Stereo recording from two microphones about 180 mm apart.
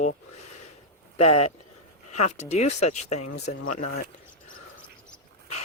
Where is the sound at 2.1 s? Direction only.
40° left (ahead or behind).